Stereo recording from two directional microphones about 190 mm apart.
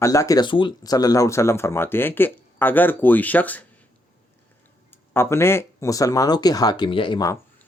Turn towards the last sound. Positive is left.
turn(degrees=20)  # may be behind; listen again after turning